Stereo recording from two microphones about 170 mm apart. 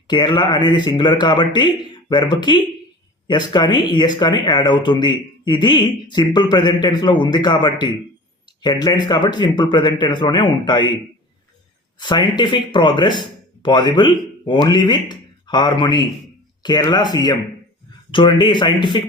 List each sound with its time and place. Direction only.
0.1 s a man's voice: 25° left (ahead or behind)
11.9 s a man's voice: 25° left (ahead or behind)